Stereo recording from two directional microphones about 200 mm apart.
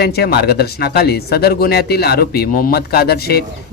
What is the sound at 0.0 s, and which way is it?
Speech, 55° left (ahead or behind).